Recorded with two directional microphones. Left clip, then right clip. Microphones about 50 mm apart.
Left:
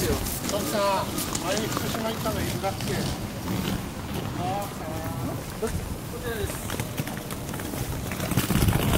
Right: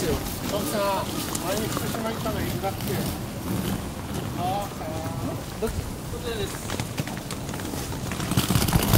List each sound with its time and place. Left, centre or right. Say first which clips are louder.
0.5 s speech: left 1 dB; left
8.3 s vehicle: right 2 dB; right